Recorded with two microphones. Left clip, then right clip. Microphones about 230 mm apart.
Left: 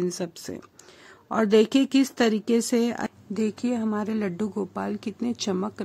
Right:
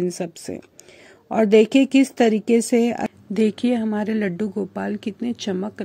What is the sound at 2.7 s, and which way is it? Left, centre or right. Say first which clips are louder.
Speech: right 5 dB; centre.